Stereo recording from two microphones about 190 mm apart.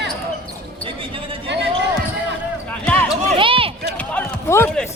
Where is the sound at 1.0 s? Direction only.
30° right (ahead or behind).